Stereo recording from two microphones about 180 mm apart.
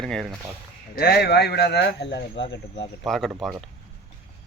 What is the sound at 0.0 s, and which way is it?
Speech, 5° left (ahead or behind).